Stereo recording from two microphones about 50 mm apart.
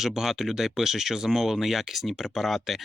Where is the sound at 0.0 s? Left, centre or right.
Centre.